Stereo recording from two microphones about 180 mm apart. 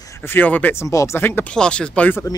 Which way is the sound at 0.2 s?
10° left (ahead or behind).